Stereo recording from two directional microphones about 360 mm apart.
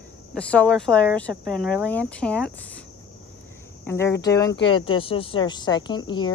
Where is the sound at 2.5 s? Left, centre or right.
Centre.